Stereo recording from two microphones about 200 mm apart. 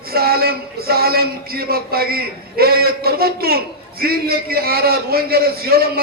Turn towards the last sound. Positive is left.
turn(degrees=-50)  # may be behind; listen again after turning